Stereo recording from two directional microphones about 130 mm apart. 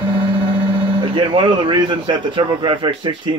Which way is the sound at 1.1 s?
40° right (ahead or behind).